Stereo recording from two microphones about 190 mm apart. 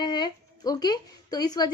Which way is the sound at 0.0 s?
20° left (ahead or behind).